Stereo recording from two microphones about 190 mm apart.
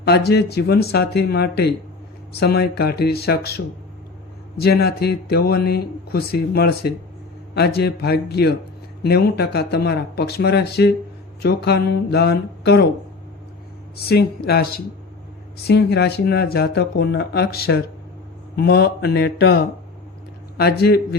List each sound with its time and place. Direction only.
0.0 s speech: 60° left (ahead or behind)
4.6 s speech: 55° left (ahead or behind)
13.9 s speech: 55° left (ahead or behind)